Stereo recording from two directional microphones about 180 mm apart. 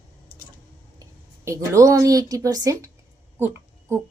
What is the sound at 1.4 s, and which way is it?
A woman's voice, 15° right (ahead or behind).